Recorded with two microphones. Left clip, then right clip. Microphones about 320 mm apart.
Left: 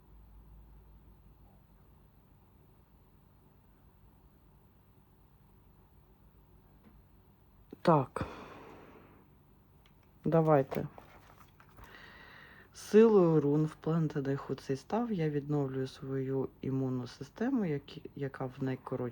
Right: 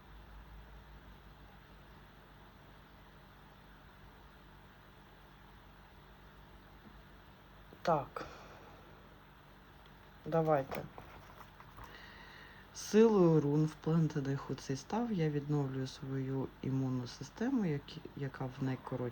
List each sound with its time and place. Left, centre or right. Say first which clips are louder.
8.1 s a sound: left 5 dB; centre
10.3 s speech: left 5 dB; centre
11.9 s speech: left 5 dB; centre